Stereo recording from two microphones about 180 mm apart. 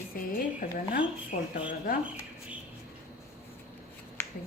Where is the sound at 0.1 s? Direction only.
50° left (ahead or behind).